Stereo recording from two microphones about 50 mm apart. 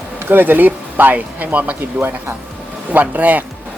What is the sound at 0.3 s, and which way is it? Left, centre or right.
Speech, right.